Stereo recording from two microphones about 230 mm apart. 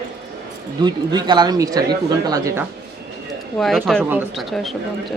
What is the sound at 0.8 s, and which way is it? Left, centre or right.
Speech, centre.